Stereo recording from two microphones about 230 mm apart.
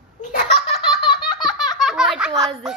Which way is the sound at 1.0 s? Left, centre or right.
Centre.